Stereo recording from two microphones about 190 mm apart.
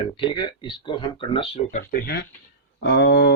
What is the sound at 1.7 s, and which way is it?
Speech, 50° left (ahead or behind).